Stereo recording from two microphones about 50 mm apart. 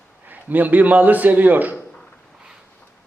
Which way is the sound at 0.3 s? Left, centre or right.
Right.